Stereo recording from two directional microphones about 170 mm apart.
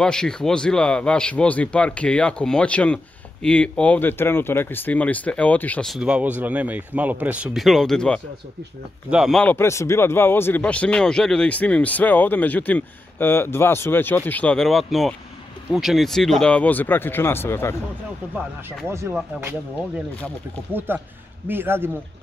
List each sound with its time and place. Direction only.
0.0 s a man's voice: 5° left (ahead or behind)
18.9 s speech: 15° right (ahead or behind)
20.7 s speech: 10° right (ahead or behind)